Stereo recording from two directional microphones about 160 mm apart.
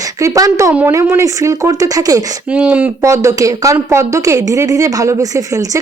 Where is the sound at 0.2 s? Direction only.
20° right (ahead or behind).